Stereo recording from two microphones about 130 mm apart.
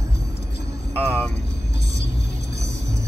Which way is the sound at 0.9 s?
15° left (ahead or behind).